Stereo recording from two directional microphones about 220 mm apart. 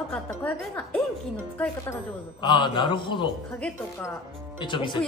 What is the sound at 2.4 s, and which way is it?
Speech, 20° left (ahead or behind).